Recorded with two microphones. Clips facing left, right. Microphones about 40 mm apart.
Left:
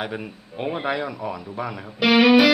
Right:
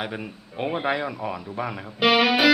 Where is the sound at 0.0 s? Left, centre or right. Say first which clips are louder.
Left 2 dB; centre.